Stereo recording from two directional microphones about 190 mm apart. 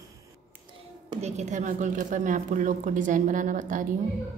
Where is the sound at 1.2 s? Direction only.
35° right (ahead or behind).